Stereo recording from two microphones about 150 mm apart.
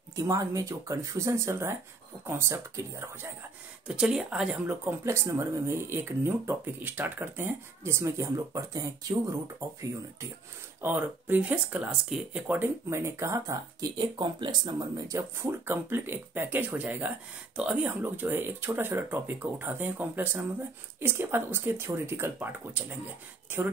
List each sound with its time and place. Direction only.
0.1 s speech: 20° right (ahead or behind)
3.8 s speech: 5° right (ahead or behind); by 9.4 s 25° right (ahead or behind)
10.8 s speech: 15° right (ahead or behind)
13.8 s speech: 30° right (ahead or behind); by 22.9 s 15° right (ahead or behind)